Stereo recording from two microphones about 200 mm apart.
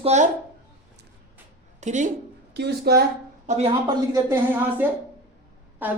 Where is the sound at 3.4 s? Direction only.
30° right (ahead or behind).